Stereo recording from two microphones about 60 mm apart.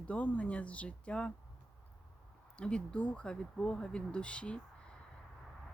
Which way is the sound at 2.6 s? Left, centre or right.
Centre.